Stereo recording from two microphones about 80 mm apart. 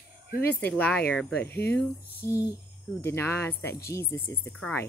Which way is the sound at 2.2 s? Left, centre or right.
Left.